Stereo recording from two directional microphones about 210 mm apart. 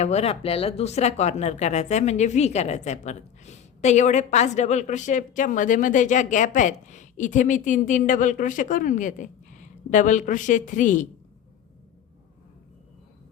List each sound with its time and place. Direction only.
0.0 s speech: 30° left (ahead or behind)